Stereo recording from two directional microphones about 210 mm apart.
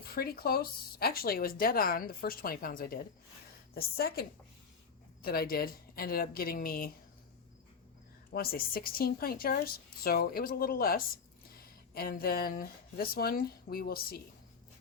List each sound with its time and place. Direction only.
0.1 s speech: 45° left (ahead or behind)
8.3 s speech: 45° left (ahead or behind)